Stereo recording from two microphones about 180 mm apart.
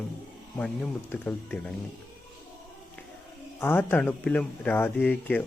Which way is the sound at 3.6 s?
10° left (ahead or behind).